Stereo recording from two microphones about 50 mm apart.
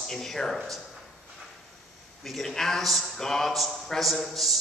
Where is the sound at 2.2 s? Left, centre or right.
Centre.